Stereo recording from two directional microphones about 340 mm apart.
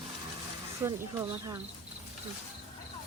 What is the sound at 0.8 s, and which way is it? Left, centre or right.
Speech, centre.